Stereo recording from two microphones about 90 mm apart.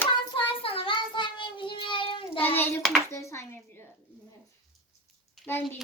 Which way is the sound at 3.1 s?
30° left (ahead or behind).